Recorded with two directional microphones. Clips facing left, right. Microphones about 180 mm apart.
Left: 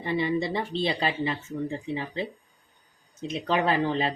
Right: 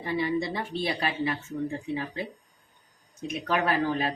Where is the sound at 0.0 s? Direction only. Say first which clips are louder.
Left 1 dB; 25° left (ahead or behind).